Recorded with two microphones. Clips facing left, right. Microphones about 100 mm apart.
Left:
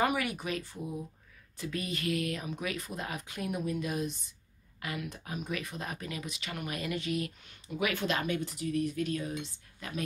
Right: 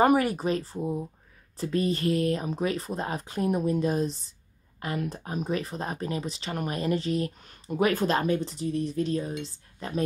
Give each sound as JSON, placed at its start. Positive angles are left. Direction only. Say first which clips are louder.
{"t": 0.0, "sound": "speech", "louder": "right 9 dB", "side_deg": -35}